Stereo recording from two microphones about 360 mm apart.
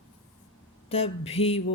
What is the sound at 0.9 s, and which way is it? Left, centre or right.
Speech, centre.